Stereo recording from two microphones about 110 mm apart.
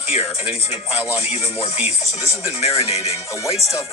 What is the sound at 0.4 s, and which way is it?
Speech, 10° right (ahead or behind).